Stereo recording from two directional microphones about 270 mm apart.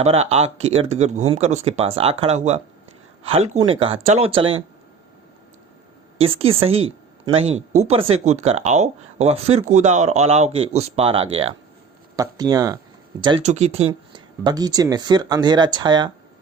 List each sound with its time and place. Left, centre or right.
0.0 s speech: right
6.1 s speech: right